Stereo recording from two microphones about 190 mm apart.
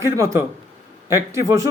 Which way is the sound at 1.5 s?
15° right (ahead or behind).